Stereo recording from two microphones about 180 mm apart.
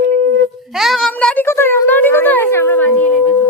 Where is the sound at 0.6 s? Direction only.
Centre (ahead or behind).